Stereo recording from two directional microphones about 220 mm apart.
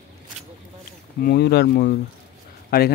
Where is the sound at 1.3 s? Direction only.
45° left (ahead or behind).